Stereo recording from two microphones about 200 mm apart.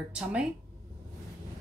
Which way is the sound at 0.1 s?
5° right (ahead or behind).